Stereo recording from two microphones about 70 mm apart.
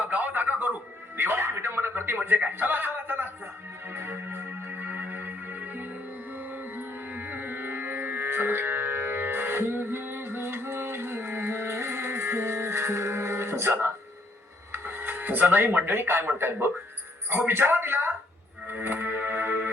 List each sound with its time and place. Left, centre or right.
0.1 s music: right
14.7 s speech: right
18.7 s music: right